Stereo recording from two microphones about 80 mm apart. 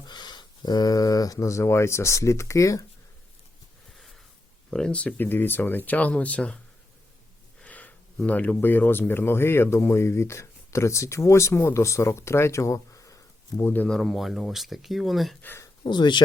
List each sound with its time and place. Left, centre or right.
0.0 s speech: left
4.7 s speech: centre
7.6 s a sound: centre
8.3 s speech: centre; by 13.7 s left
13.8 s speech: centre
15.4 s speech: left
15.9 s speech: left